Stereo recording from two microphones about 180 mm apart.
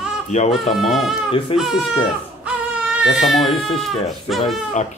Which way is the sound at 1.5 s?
30° left (ahead or behind).